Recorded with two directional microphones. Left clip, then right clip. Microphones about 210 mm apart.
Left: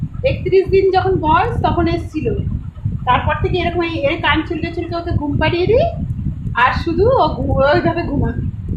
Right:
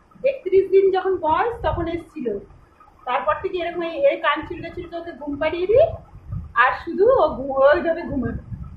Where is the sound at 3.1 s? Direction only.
25° left (ahead or behind).